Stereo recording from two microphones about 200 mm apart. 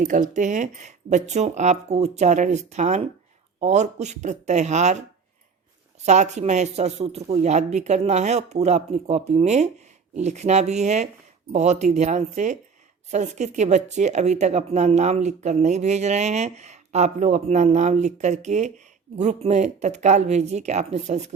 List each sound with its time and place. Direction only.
0.0 s a woman's voice: 40° right (ahead or behind)